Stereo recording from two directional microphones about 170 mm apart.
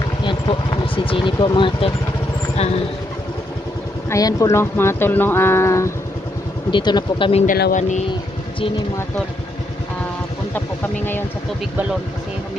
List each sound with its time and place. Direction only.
0.2 s speech: 30° left (ahead or behind)
4.1 s speech: 20° left (ahead or behind)
6.7 s speech: 25° left (ahead or behind)
7.4 s speech: 55° left (ahead or behind)
10.5 s speech: 10° left (ahead or behind)